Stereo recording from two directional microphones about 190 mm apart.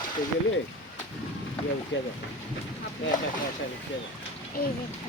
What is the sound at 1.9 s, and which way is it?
Speech, 75° left (ahead or behind).